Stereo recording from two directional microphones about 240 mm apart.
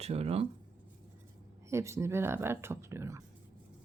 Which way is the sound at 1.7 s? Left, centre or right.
Centre.